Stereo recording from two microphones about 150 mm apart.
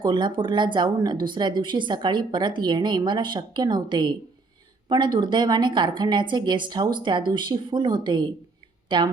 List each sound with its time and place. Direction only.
0.0 s a woman's voice: 30° right (ahead or behind)